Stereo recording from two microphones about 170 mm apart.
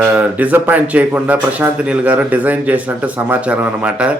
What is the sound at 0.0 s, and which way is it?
Speech, 10° right (ahead or behind).